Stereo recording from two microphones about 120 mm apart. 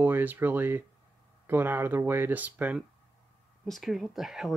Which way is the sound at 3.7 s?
Centre (ahead or behind).